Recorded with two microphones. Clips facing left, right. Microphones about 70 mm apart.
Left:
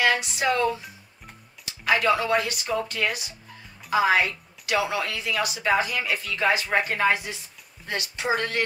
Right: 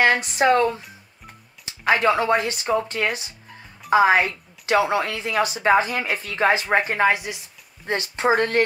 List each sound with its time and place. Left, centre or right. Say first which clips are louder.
0.0 s speech: right 5 dB; right; by 7.3 s centre
7.8 s speech: right 7 dB; right